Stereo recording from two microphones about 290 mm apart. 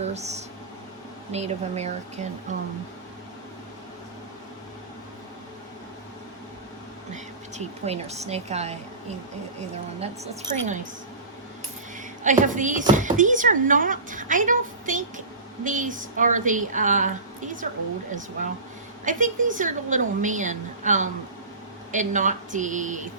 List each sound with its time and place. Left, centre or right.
0.0 s speech: right
7.1 s speech: right
10.0 s speech: right
12.2 s speech: right
19.0 s speech: right